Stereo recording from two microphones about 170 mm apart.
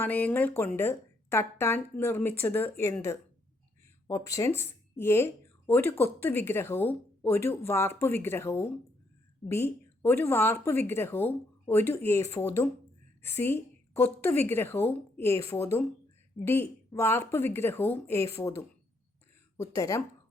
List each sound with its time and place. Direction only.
0.0 s speech: 10° left (ahead or behind)